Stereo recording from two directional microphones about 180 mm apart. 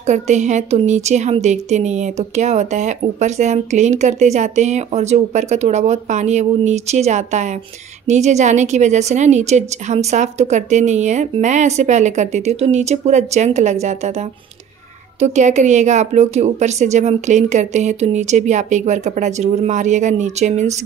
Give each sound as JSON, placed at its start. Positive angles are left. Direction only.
{"t": 0.0, "sound": "a woman's voice", "side_deg": -40}